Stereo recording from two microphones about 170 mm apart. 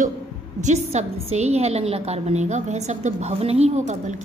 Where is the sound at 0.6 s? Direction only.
45° right (ahead or behind).